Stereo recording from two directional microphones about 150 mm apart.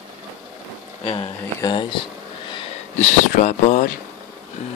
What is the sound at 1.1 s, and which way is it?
Speech, 30° left (ahead or behind).